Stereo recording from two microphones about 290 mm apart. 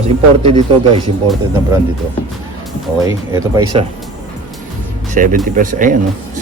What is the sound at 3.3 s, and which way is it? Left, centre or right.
Speech, centre.